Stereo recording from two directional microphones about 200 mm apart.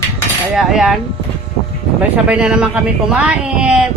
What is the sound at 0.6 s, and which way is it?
Speech, centre (ahead or behind).